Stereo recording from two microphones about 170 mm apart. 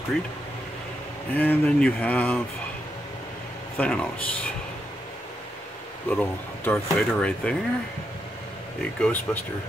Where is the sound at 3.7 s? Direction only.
5° left (ahead or behind).